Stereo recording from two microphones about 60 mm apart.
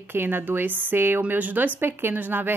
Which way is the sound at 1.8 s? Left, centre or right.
Right.